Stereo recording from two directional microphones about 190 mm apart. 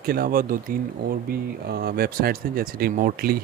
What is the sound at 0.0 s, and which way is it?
Speech, 50° right (ahead or behind).